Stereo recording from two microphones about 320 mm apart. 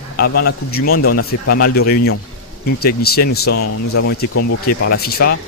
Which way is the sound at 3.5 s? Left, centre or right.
Left.